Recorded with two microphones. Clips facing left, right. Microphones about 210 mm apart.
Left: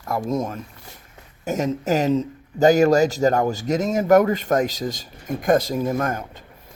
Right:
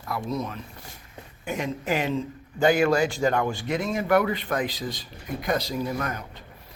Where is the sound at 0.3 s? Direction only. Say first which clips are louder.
Left 6 dB; 45° left (ahead or behind).